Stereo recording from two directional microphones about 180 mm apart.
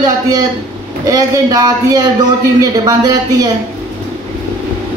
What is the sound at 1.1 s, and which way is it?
Speech, 20° right (ahead or behind).